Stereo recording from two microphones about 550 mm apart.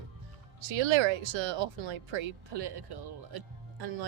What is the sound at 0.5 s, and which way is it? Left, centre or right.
Speech, right.